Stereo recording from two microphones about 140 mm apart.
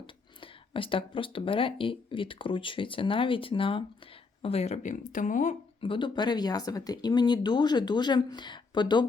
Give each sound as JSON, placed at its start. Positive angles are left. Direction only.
{"t": 0.7, "sound": "speech", "side_deg": 40}
{"t": 5.8, "sound": "speech", "side_deg": 35}